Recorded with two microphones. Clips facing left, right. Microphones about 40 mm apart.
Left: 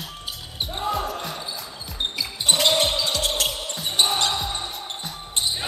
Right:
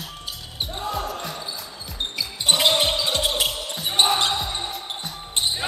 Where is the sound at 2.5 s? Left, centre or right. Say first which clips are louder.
Right 1 dB; centre.